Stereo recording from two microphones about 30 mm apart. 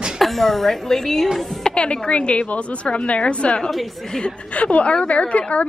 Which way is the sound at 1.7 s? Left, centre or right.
Left.